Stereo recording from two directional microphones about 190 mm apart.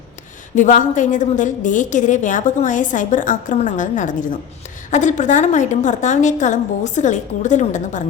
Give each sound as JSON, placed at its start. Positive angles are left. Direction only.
{"t": 0.5, "sound": "a woman's voice", "side_deg": 40}